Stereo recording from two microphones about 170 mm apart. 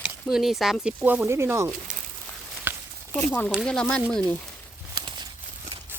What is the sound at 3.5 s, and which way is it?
Speech, 5° left (ahead or behind).